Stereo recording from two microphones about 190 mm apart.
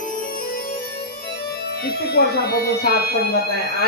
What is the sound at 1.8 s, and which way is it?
Speech, 60° left (ahead or behind).